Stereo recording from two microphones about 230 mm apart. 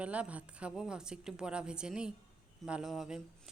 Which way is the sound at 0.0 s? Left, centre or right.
Centre.